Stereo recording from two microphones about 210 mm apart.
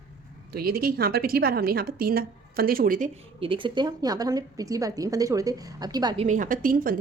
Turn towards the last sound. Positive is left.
turn(degrees=-40)  # may be behind; listen again after turning